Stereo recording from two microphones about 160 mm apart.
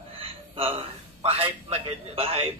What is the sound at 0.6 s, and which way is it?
A man's voice, 35° right (ahead or behind).